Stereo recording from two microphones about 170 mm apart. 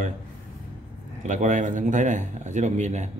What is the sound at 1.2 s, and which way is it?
A man's voice, 45° right (ahead or behind).